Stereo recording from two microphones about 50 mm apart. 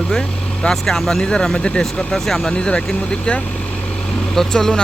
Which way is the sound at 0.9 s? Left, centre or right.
Centre.